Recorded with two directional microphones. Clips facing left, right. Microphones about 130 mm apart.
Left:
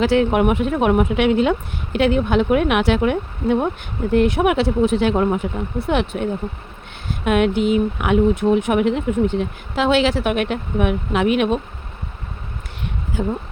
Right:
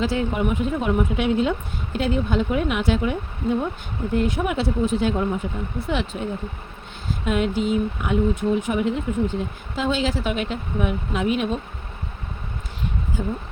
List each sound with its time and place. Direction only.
0.0 s speech: 75° left (ahead or behind)
13.1 s speech: 75° left (ahead or behind)